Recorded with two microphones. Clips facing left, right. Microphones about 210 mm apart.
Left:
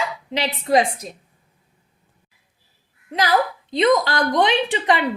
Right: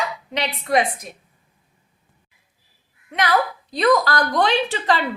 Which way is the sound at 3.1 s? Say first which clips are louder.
Left 1 dB; 25° left (ahead or behind).